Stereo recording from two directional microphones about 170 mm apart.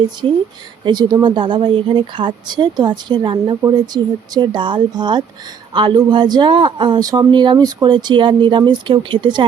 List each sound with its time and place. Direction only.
0.9 s speech: 25° right (ahead or behind)